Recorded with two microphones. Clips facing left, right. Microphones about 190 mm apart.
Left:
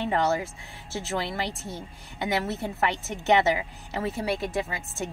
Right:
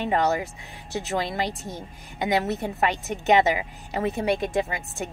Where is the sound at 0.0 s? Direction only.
15° right (ahead or behind).